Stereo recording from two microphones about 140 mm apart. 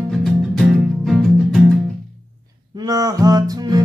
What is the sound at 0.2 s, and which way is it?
Music, centre (ahead or behind).